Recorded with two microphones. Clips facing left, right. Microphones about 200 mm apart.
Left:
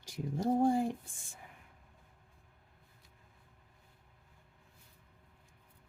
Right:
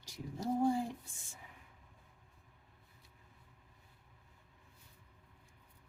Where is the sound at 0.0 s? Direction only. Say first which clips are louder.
Left 6 dB; 50° left (ahead or behind).